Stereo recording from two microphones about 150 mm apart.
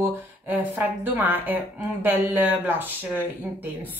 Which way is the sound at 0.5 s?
15° right (ahead or behind).